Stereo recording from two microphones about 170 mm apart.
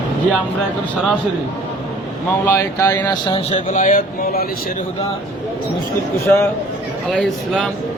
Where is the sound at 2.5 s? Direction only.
15° left (ahead or behind).